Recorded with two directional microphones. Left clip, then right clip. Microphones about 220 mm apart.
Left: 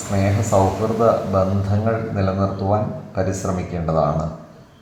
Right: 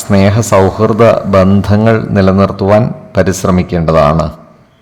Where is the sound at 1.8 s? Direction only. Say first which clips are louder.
Right 12 dB; 45° right (ahead or behind).